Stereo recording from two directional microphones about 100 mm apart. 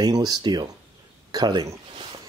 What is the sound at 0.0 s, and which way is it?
Speech, 40° right (ahead or behind).